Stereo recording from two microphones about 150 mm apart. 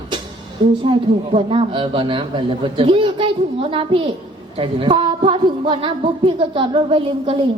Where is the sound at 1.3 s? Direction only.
35° right (ahead or behind).